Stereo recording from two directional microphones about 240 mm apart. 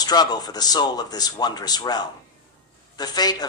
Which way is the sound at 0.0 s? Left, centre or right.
Centre.